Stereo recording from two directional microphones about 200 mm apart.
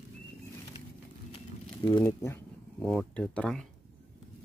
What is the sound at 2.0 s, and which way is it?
Speech, 10° left (ahead or behind).